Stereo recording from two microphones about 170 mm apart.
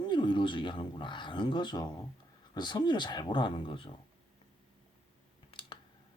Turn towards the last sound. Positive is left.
turn(degrees=30)  # may be behind; listen again after turning